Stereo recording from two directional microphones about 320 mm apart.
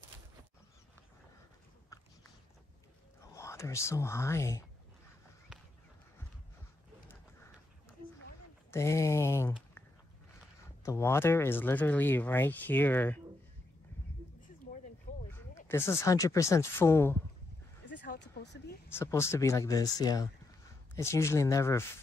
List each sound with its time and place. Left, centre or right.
1.9 s a sound: centre
3.3 s speech: centre
8.7 s speech: centre
15.3 s speech: centre
17.8 s a sound: left
18.9 s speech: centre